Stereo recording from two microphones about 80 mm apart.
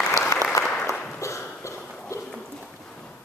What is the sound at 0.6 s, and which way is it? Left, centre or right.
Applause, left.